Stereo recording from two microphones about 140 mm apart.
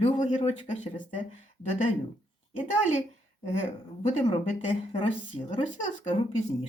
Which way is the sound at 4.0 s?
40° left (ahead or behind).